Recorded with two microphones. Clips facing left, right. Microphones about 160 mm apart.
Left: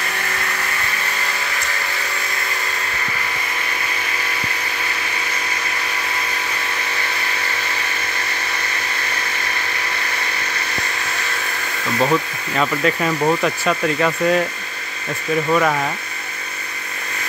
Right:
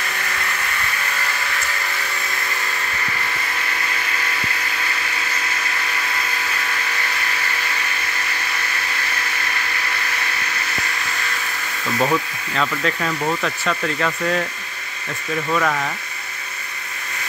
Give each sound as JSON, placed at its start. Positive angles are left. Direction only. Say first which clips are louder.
{"t": 12.0, "sound": "speech", "louder": "left 2 dB", "side_deg": 5}
{"t": 13.2, "sound": "speech", "louder": "left 5 dB", "side_deg": 25}
{"t": 13.7, "sound": "speech", "louder": "left 3 dB", "side_deg": 10}
{"t": 15.5, "sound": "speech", "louder": "left 3 dB", "side_deg": 20}